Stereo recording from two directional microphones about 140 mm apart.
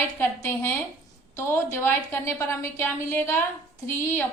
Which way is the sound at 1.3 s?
20° left (ahead or behind).